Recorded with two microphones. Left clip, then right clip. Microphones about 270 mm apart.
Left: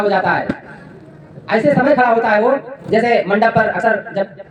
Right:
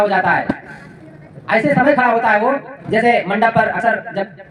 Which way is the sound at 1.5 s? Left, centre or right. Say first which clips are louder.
Right 1 dB; centre.